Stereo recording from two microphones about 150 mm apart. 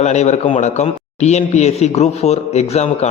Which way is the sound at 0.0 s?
50° left (ahead or behind).